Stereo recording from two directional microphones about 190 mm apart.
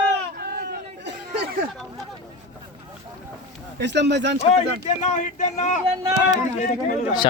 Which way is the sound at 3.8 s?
65° right (ahead or behind).